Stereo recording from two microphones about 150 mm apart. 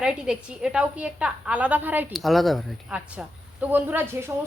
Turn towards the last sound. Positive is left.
turn(degrees=-15)  # may be behind; listen again after turning